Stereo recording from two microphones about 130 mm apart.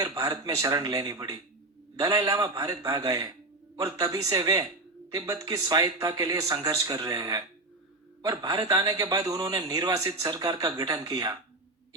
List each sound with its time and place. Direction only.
0.0 s a man's voice: 25° right (ahead or behind)